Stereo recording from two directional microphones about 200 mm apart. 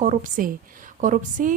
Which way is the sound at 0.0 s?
40° right (ahead or behind).